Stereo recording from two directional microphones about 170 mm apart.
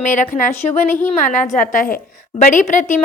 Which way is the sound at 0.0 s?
45° left (ahead or behind).